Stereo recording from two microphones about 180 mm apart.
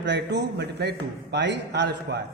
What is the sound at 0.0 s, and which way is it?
A man's voice, 75° right (ahead or behind).